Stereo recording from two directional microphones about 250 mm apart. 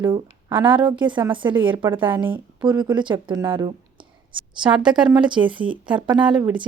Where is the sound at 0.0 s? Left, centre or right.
Centre.